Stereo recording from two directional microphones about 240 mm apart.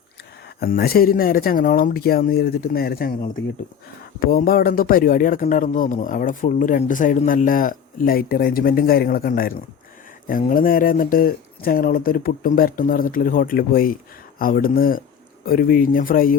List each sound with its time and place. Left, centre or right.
0.4 s speech: left